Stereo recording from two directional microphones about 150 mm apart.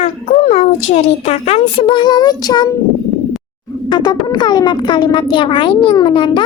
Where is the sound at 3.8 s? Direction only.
30° left (ahead or behind).